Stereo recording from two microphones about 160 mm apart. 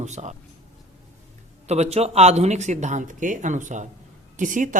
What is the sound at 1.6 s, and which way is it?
Speech, 45° right (ahead or behind).